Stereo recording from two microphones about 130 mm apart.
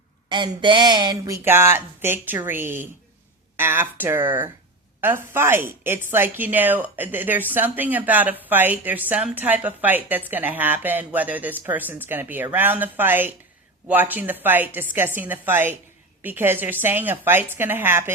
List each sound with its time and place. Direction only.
0.3 s speech: 35° right (ahead or behind); by 18.1 s 15° right (ahead or behind)